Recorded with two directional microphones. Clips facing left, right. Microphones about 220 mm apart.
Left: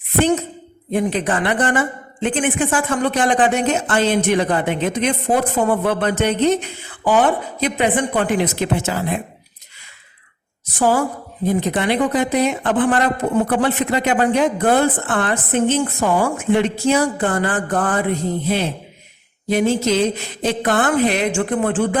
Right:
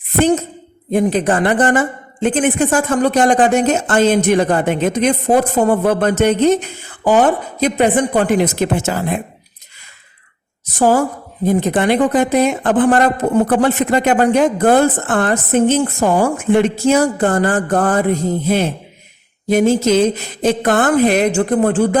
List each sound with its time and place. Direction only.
0.2 s speech: 45° right (ahead or behind)
10.8 s speech: 45° right (ahead or behind)